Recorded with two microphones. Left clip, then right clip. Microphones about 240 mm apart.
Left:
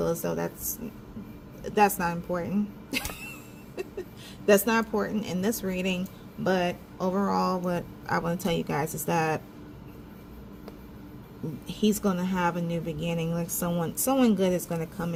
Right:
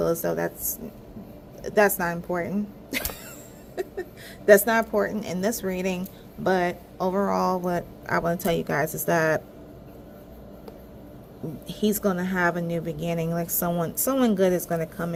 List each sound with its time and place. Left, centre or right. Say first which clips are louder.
0.0 s speech: right 4 dB; centre
4.4 s speech: right 5 dB; centre
11.7 s a woman's voice: right 2 dB; centre